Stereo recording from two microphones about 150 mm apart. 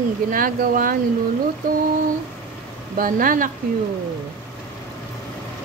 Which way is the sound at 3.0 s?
65° right (ahead or behind).